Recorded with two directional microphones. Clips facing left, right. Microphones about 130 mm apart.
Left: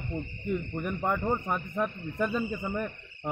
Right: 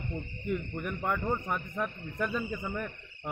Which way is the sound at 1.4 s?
10° left (ahead or behind).